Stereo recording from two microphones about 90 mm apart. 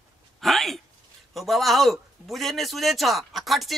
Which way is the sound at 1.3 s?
Centre (ahead or behind).